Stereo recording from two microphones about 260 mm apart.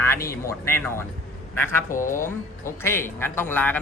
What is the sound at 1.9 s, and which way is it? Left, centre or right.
Speech, left.